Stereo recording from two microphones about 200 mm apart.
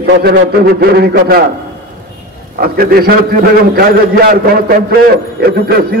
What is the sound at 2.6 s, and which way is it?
A man's voice, 50° right (ahead or behind).